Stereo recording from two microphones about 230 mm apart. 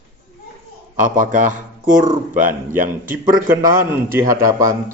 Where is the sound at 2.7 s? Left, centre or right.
Centre.